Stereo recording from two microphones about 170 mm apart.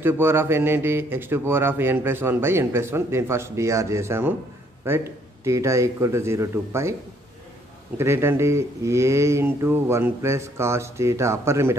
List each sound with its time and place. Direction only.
0.0 s a man's voice: 15° right (ahead or behind)
8.0 s a man's voice: 15° right (ahead or behind)